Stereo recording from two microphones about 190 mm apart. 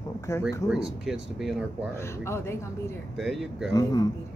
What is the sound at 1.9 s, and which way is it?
Speech, 15° left (ahead or behind).